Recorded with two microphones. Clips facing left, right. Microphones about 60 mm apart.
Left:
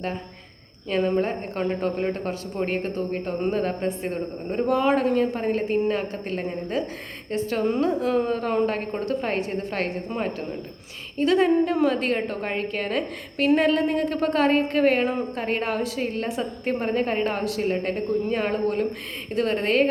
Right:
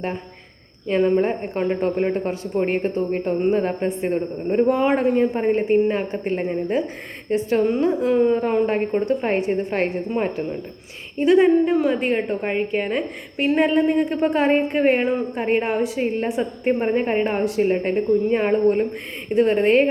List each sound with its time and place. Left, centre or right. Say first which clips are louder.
0.9 s speech: right 5 dB; right